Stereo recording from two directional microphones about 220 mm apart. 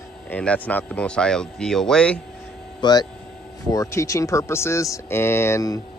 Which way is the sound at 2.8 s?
20° left (ahead or behind).